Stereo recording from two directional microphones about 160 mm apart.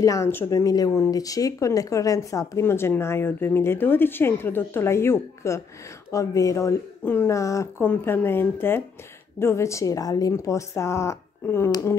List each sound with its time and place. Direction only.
0.0 s speech: 20° left (ahead or behind)